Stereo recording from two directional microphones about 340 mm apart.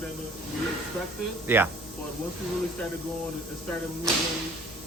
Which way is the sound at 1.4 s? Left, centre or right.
Centre.